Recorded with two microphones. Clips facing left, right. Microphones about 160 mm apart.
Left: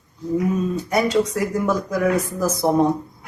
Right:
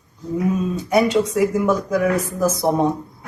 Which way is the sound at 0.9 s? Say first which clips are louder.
Right 3 dB; centre (ahead or behind).